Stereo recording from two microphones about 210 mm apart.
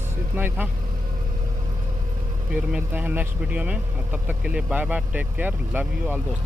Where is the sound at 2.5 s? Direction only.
5° right (ahead or behind).